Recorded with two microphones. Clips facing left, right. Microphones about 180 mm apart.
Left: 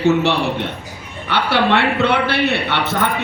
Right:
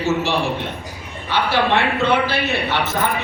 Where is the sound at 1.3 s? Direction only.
65° left (ahead or behind).